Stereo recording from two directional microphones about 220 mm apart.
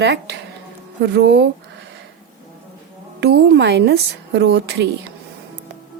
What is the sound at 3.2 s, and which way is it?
Speech, 50° right (ahead or behind).